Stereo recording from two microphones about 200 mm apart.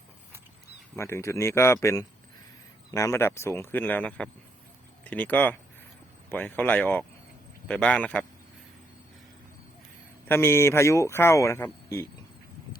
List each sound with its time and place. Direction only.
0.9 s a man's voice: 15° left (ahead or behind)
10.2 s speech: 10° left (ahead or behind)